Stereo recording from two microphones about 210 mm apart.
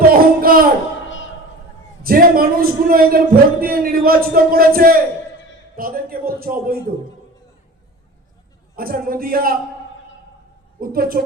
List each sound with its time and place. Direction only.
0.1 s music: 45° right (ahead or behind)
1.0 s a sound: 65° left (ahead or behind)
2.0 s a man's voice: 45° right (ahead or behind)
8.7 s a man's voice: 45° right (ahead or behind)
10.8 s a woman's voice: 45° right (ahead or behind)